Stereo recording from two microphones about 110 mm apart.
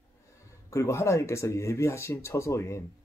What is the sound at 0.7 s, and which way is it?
Speech, 25° left (ahead or behind).